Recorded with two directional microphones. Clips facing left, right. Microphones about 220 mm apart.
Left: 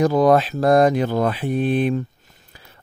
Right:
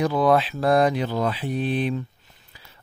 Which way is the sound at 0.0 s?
45° left (ahead or behind).